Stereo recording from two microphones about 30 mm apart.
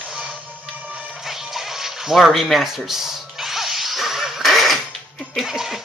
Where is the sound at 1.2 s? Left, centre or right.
Centre.